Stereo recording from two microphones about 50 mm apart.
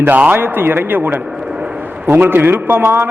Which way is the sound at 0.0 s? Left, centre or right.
Right.